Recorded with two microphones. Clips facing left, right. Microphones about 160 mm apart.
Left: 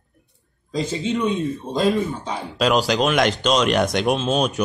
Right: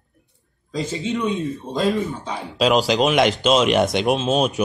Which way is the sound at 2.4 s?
Centre (ahead or behind).